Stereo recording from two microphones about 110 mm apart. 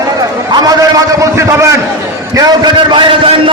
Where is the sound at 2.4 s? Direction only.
40° right (ahead or behind).